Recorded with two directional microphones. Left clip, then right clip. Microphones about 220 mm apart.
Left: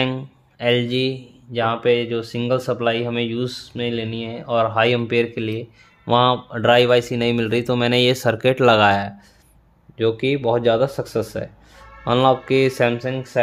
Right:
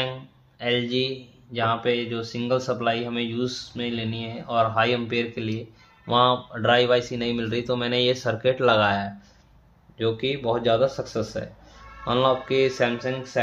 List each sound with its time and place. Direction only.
0.0 s speech: 50° left (ahead or behind)